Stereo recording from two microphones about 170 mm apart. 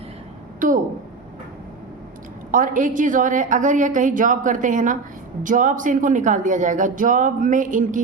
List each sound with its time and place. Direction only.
0.6 s speech: 50° right (ahead or behind)
2.5 s speech: 50° right (ahead or behind)